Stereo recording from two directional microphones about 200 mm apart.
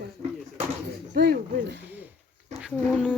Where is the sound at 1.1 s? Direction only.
55° right (ahead or behind).